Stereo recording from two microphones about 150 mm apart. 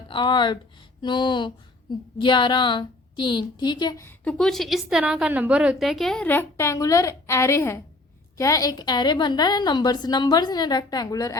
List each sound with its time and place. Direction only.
0.1 s a woman's voice: 30° left (ahead or behind)
4.2 s a woman's voice: 5° left (ahead or behind); by 11.3 s 25° left (ahead or behind)